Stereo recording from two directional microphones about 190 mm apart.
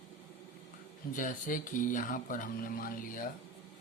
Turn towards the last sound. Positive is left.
turn(degrees=45)  # may be behind; listen again after turning